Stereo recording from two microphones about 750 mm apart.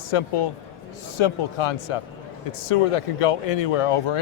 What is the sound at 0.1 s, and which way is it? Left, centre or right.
Speech, left.